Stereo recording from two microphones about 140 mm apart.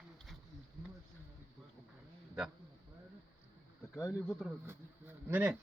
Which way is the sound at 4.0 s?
20° left (ahead or behind).